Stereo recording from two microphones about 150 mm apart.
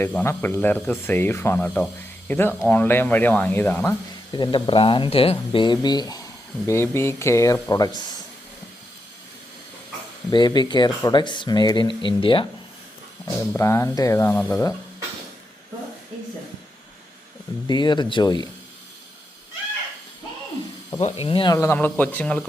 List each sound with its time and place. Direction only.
0.0 s speech: 15° left (ahead or behind)
4.3 s speech: 30° left (ahead or behind)
10.3 s speech: 30° left (ahead or behind)
13.5 s speech: 20° left (ahead or behind)
17.7 s speech: 30° left (ahead or behind)
21.2 s speech: 35° left (ahead or behind)
21.5 s speech: 20° left (ahead or behind)